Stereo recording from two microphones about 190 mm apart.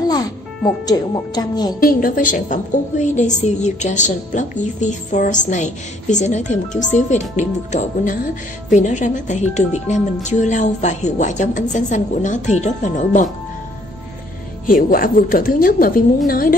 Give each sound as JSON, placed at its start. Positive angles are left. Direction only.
{"t": 0.8, "sound": "speech", "side_deg": 20}
{"t": 1.8, "sound": "a woman's voice", "side_deg": 50}
{"t": 14.7, "sound": "a woman's voice", "side_deg": 45}